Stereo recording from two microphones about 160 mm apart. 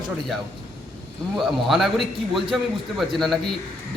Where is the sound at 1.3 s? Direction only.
Centre (ahead or behind).